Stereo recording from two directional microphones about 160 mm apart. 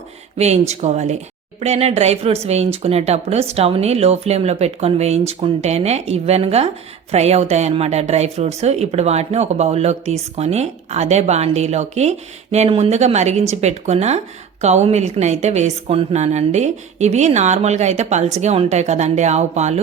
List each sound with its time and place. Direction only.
0.3 s speech: 45° right (ahead or behind)